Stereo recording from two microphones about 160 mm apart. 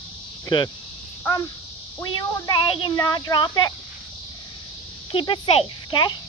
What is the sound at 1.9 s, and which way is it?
Speech, 15° left (ahead or behind).